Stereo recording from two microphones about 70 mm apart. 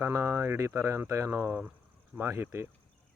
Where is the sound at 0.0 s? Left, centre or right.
Right.